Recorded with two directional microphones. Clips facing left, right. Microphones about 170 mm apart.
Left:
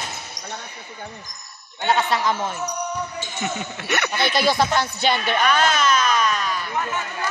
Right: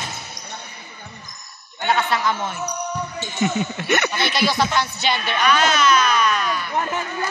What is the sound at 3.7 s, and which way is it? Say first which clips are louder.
Speech: right 3 dB; centre (ahead or behind).